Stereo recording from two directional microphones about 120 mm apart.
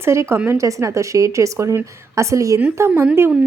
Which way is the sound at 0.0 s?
20° right (ahead or behind).